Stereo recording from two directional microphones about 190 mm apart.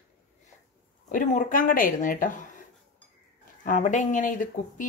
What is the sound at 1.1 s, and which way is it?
Speech, 45° left (ahead or behind).